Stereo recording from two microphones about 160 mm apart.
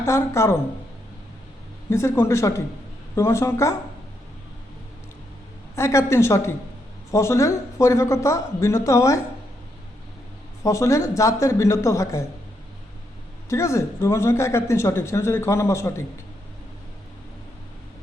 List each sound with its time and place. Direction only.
0.0 s speech: 15° left (ahead or behind)
1.9 s speech: 15° left (ahead or behind)
5.7 s speech: 15° left (ahead or behind)
10.6 s speech: 20° left (ahead or behind)
13.5 s speech: 20° left (ahead or behind)